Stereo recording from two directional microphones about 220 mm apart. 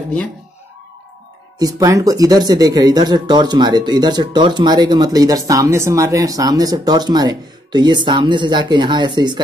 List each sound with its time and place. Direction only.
1.6 s speech: 15° right (ahead or behind)